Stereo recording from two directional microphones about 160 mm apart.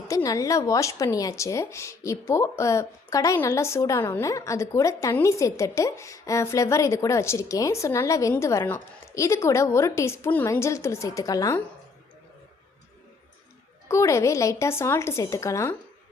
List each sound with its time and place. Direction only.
0.1 s speech: 20° left (ahead or behind)
13.8 s a woman's voice: 20° left (ahead or behind)